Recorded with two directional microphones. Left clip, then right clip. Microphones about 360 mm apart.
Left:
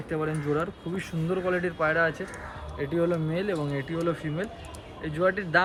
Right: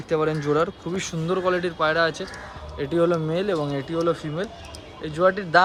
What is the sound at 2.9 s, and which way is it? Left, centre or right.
Speech, centre.